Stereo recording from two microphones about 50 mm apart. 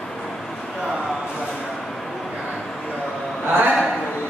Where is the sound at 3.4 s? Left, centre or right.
Right.